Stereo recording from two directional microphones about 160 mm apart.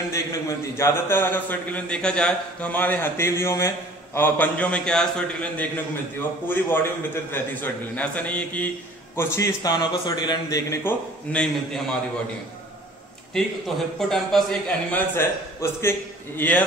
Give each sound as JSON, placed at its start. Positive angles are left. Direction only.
{"t": 0.1, "sound": "a man's voice", "side_deg": 20}
{"t": 13.9, "sound": "speech", "side_deg": 0}
{"t": 15.1, "sound": "a man's voice", "side_deg": 15}